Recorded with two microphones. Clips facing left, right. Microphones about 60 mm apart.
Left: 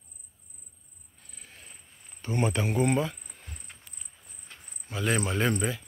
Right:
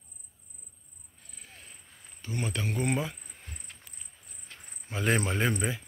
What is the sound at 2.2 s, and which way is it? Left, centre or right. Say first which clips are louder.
Speech: left 6 dB; left.